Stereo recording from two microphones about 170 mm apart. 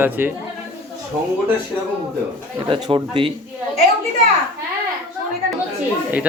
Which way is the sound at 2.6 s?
30° right (ahead or behind).